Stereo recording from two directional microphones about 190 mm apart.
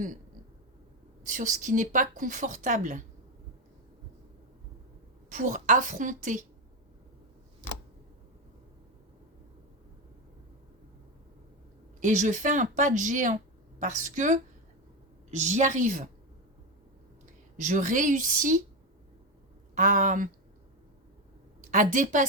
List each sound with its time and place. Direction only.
1.2 s a woman's voice: 40° right (ahead or behind)
5.3 s a woman's voice: 40° right (ahead or behind)
11.9 s a woman's voice: 40° right (ahead or behind)
17.6 s a woman's voice: 40° right (ahead or behind)
19.7 s a woman's voice: 45° right (ahead or behind)
21.6 s a woman's voice: 40° right (ahead or behind)